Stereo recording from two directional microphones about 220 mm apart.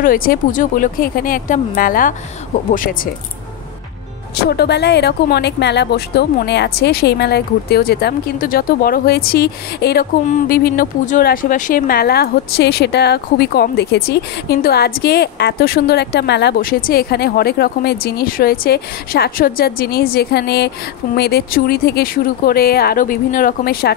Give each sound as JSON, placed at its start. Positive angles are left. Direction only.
{"t": 0.0, "sound": "speech", "side_deg": 40}
{"t": 4.5, "sound": "speech", "side_deg": 50}